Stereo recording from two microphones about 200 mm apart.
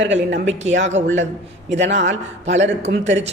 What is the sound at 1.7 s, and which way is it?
A man's voice, 65° right (ahead or behind).